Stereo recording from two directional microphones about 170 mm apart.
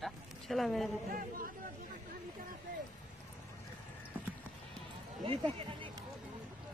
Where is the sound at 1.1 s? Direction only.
55° right (ahead or behind).